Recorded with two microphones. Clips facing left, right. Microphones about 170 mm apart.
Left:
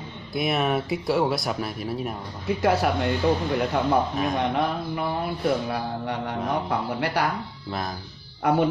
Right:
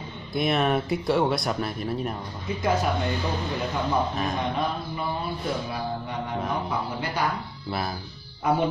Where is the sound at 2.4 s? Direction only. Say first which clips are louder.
Left 3 dB; 70° left (ahead or behind).